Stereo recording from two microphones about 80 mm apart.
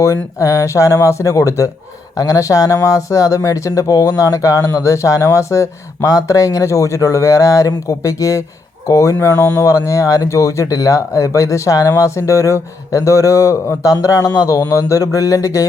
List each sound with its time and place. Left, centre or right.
0.0 s speech: left
9.1 s speech: left